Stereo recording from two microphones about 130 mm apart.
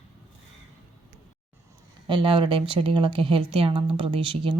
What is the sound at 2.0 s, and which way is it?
Speech, 40° right (ahead or behind).